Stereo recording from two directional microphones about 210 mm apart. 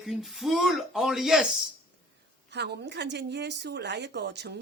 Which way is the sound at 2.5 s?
55° right (ahead or behind).